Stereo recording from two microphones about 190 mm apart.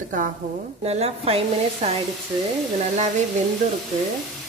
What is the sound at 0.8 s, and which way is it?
Speech, 35° right (ahead or behind).